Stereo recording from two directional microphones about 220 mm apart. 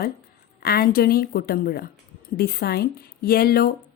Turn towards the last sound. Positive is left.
turn(degrees=45)  # may be behind; listen again after turning